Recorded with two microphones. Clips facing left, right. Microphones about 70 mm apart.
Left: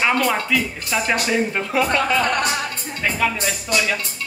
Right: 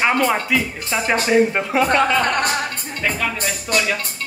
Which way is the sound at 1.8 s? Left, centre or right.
Right.